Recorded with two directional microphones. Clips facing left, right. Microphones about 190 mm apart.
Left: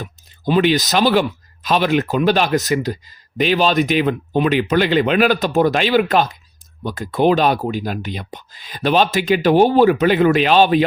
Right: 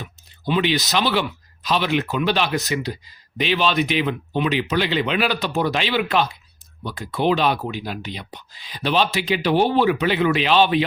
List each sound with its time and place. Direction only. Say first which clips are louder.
0.0 s speech: left 5 dB; 45° left (ahead or behind)